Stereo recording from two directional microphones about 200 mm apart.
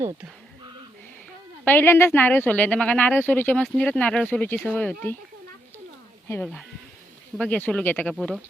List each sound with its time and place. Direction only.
1.6 s speech: 10° left (ahead or behind)
6.2 s speech: 10° left (ahead or behind)